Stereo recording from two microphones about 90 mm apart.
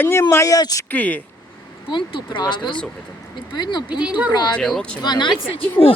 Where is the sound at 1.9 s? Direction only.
65° left (ahead or behind).